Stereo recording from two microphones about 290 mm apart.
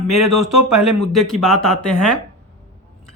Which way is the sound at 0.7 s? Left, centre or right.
Centre.